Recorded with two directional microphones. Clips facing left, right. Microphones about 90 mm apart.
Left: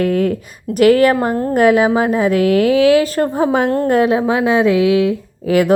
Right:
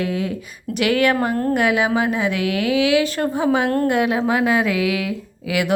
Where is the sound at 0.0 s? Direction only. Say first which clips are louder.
Left 8 dB; 50° left (ahead or behind).